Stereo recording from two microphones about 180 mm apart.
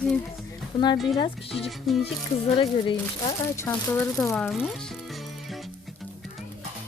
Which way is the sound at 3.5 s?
15° left (ahead or behind).